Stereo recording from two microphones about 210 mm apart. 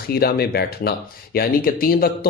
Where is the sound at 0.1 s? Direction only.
50° left (ahead or behind).